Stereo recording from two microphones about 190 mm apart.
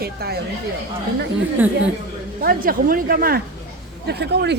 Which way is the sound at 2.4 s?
50° right (ahead or behind).